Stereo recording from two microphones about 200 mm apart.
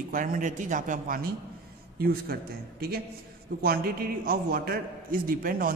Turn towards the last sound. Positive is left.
turn(degrees=-45)  # may be behind; listen again after turning